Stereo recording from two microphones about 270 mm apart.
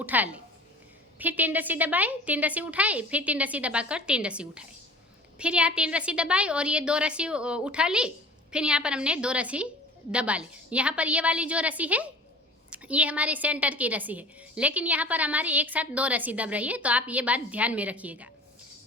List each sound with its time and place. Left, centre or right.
0.0 s a woman's voice: centre